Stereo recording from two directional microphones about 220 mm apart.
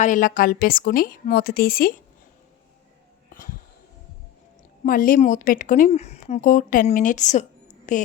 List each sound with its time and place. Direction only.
0.0 s a woman's voice: 35° left (ahead or behind)
4.9 s a woman's voice: 40° left (ahead or behind)